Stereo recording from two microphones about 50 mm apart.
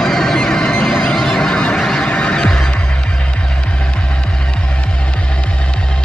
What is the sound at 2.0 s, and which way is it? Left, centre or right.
Music, left.